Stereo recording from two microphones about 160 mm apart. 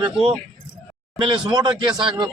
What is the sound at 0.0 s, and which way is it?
A man's voice, 30° right (ahead or behind).